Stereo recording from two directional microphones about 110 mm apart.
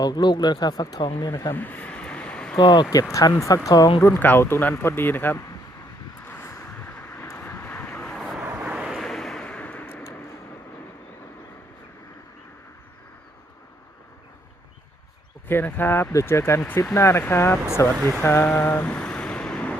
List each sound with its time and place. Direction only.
0.0 s speech: 40° left (ahead or behind)
1.5 s a sound: 15° left (ahead or behind)
2.6 s speech: 45° left (ahead or behind)
2.9 s speech: 30° left (ahead or behind)
4.0 s speech: 20° left (ahead or behind)
6.2 s vehicle: 20° left (ahead or behind); by 8.4 s centre (ahead or behind)
8.4 s a sound: 15° right (ahead or behind); by 10.1 s 15° left (ahead or behind)
15.4 s speech: 20° left (ahead or behind)
18.2 s vehicle: 20° left (ahead or behind)